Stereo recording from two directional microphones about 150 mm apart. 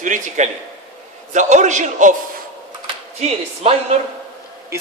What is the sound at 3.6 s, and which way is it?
Speech, 40° right (ahead or behind).